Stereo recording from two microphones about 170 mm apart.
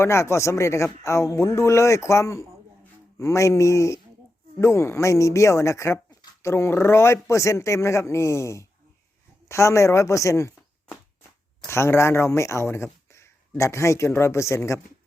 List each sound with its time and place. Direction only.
0.0 s speech: 15° left (ahead or behind)
11.6 s speech: 15° left (ahead or behind)